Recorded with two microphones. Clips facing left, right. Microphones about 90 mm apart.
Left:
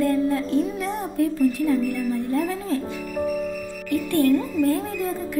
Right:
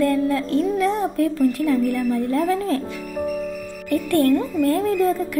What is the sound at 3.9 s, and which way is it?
Speech, 50° right (ahead or behind).